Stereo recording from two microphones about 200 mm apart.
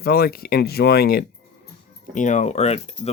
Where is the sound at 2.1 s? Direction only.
40° left (ahead or behind).